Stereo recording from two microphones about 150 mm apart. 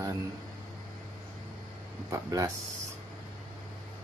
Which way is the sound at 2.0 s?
20° right (ahead or behind).